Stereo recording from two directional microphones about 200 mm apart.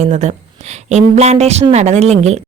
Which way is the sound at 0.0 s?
35° right (ahead or behind).